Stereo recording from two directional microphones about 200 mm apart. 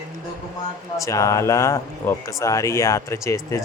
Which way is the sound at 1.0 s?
15° left (ahead or behind).